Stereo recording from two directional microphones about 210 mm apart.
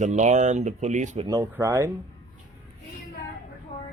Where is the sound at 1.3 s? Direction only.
15° right (ahead or behind).